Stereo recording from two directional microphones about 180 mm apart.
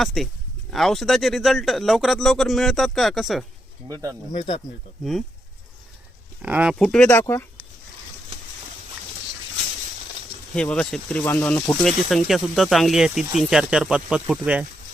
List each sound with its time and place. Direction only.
0.0 s speech: centre (ahead or behind)
3.8 s speech: 20° right (ahead or behind)
6.4 s speech: 5° right (ahead or behind); by 7.4 s 15° left (ahead or behind)
10.5 s speech: 5° left (ahead or behind)